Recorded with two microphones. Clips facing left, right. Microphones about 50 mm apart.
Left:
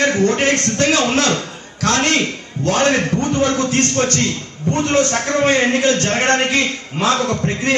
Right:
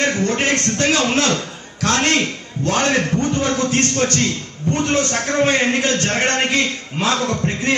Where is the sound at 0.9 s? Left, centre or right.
Left.